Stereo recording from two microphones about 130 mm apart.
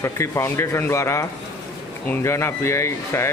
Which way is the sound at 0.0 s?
20° left (ahead or behind).